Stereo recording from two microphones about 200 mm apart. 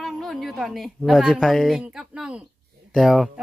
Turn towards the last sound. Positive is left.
turn(degrees=0)  # may be behind; listen again after turning